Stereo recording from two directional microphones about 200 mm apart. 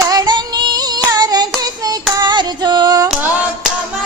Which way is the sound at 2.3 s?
20° right (ahead or behind).